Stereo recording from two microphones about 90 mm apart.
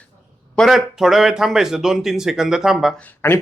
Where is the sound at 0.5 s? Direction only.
Centre (ahead or behind).